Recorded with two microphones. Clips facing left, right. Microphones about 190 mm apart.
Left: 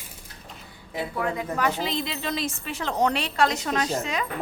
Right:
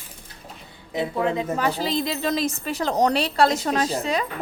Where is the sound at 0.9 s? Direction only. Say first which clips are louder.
Right 5 dB; 20° right (ahead or behind).